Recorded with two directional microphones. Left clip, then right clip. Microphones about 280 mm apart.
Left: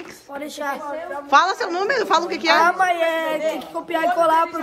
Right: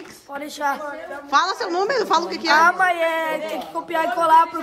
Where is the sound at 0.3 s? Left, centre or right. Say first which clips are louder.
Right 3 dB; centre.